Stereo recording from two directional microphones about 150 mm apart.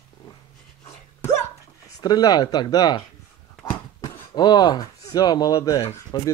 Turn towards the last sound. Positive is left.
turn(degrees=20)  # may be behind; listen again after turning